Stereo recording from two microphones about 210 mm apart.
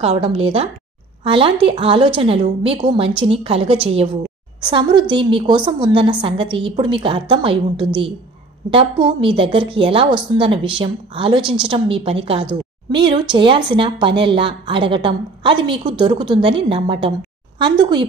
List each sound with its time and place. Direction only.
0.0 s a woman's voice: 25° right (ahead or behind)